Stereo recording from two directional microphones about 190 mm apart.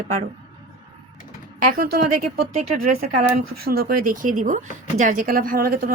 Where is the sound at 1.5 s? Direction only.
50° right (ahead or behind).